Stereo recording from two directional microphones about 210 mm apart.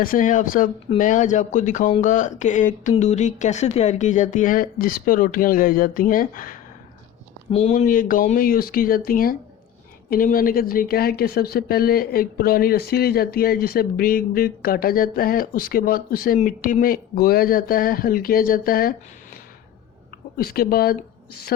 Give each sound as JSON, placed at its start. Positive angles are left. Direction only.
{"t": 0.0, "sound": "speech", "side_deg": 40}
{"t": 20.4, "sound": "speech", "side_deg": 45}